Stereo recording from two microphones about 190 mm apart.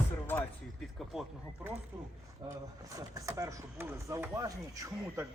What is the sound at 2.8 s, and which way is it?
A man's voice, 15° right (ahead or behind).